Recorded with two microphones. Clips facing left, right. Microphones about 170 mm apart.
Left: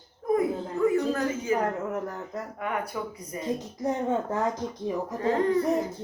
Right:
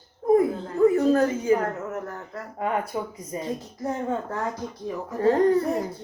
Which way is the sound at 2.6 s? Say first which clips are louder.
Right 5 dB; 25° right (ahead or behind).